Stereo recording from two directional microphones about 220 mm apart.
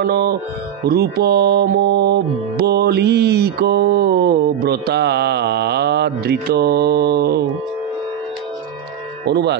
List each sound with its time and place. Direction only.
0.0 s music: 45° right (ahead or behind)
9.2 s music: 50° right (ahead or behind)